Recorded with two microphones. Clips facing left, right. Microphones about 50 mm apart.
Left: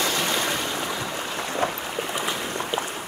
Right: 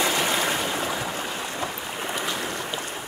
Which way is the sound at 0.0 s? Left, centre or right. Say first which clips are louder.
Right 1 dB; centre.